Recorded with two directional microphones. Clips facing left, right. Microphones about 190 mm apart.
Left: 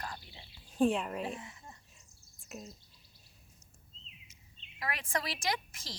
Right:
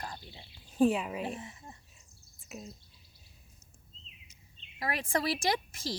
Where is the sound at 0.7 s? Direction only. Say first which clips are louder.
Right 2 dB; 5° right (ahead or behind).